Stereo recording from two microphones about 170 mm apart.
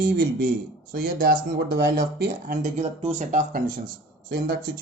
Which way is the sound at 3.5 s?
55° right (ahead or behind).